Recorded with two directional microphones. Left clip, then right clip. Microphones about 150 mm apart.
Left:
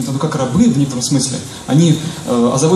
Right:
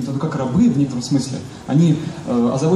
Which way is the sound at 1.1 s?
25° left (ahead or behind).